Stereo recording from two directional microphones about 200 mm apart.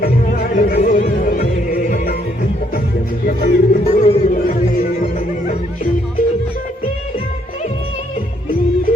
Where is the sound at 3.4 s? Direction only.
35° left (ahead or behind).